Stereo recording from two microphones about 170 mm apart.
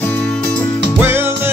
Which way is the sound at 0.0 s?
10° left (ahead or behind).